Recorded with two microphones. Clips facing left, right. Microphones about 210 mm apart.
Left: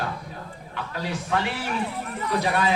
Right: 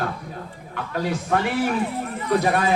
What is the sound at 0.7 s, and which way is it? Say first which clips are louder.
Speech: right 5 dB; 50° right (ahead or behind).